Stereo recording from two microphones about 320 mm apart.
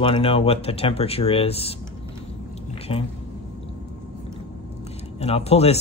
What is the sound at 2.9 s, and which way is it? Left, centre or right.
Speech, centre.